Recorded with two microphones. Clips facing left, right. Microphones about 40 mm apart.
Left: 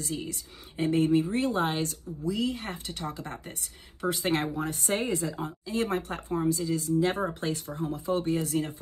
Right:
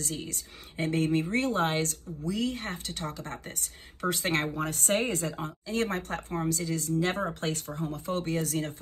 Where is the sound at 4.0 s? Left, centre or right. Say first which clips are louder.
Left 1 dB; right.